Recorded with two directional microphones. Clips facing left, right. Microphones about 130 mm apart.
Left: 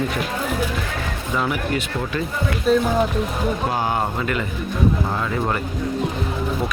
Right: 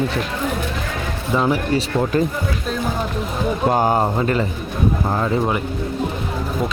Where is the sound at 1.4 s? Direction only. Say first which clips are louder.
Right 4 dB; 30° right (ahead or behind).